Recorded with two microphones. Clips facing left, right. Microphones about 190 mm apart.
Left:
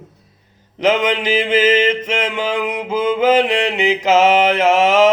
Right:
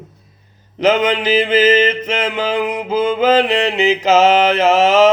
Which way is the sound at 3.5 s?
25° right (ahead or behind).